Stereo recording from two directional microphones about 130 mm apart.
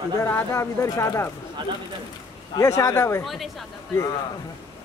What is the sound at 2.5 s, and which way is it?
Speech, 25° left (ahead or behind).